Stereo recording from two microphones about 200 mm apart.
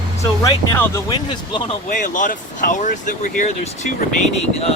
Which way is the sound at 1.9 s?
40° left (ahead or behind).